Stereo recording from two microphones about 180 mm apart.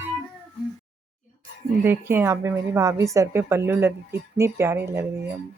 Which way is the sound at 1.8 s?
15° right (ahead or behind).